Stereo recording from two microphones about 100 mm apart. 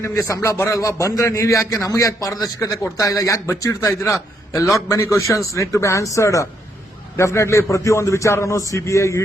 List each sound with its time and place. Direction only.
0.0 s a man's voice: 30° left (ahead or behind)